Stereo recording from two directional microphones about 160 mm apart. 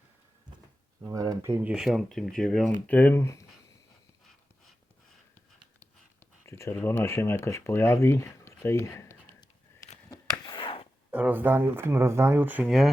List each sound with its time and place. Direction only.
1.0 s speech: 20° right (ahead or behind); by 3.4 s 15° left (ahead or behind)
6.4 s speech: 15° left (ahead or behind)
10.4 s a sound: 30° left (ahead or behind)
11.1 s speech: 10° right (ahead or behind)